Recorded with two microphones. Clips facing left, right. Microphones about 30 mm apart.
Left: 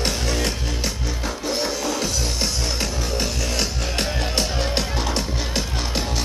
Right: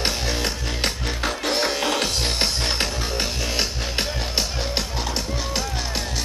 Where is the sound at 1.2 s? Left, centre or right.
Right.